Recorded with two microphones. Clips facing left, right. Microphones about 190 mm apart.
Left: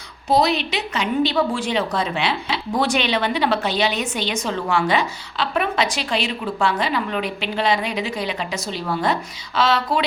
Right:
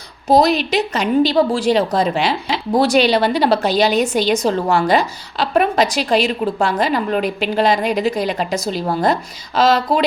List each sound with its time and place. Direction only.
0.3 s a woman's voice: 40° right (ahead or behind)